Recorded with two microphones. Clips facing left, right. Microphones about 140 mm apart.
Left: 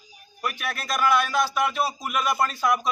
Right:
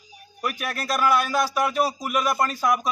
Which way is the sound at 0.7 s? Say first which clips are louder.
Right 1 dB; 40° right (ahead or behind).